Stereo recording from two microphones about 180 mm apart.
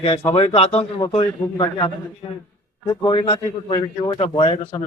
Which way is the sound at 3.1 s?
30° left (ahead or behind).